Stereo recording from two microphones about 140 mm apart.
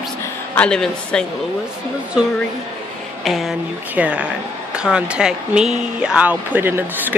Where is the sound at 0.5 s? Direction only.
5° left (ahead or behind).